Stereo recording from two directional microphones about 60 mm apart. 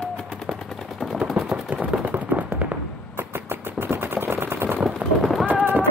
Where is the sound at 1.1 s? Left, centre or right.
Centre.